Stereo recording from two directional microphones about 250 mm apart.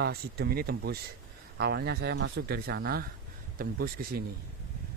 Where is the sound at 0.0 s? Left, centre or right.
Right.